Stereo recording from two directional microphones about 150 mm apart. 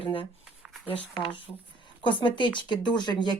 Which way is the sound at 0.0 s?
35° left (ahead or behind).